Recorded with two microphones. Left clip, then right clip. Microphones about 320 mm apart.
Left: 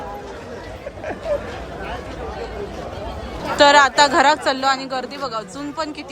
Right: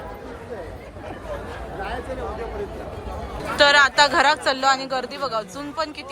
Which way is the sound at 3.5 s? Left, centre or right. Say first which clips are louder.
Left 3 dB; centre.